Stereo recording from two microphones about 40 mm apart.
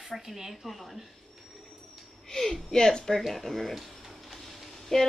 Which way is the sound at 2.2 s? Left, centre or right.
Centre.